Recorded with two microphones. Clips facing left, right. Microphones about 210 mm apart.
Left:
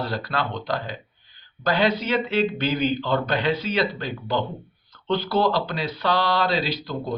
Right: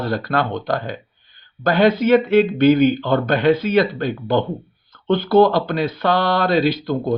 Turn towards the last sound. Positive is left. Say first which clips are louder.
# right 9 dB
turn(degrees=-55)  # may be behind; listen again after turning